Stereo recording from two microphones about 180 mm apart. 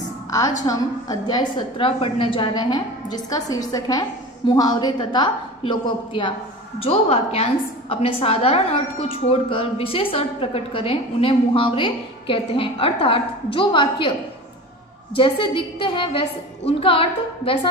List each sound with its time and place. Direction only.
0.6 s a woman's voice: 20° left (ahead or behind)
15.1 s a woman's voice: 25° left (ahead or behind)